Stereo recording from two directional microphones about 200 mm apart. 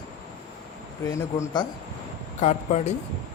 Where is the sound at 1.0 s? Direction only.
15° left (ahead or behind).